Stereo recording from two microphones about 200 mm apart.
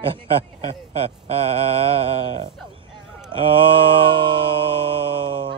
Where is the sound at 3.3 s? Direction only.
25° right (ahead or behind).